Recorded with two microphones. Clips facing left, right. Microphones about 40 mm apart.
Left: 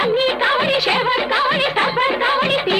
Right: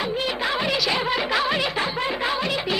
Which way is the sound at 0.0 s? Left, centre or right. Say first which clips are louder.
Left 8 dB; left.